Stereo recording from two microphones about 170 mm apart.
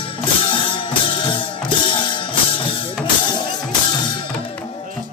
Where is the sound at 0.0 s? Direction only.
30° left (ahead or behind).